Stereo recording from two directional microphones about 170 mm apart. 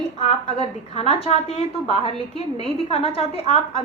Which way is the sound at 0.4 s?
35° left (ahead or behind).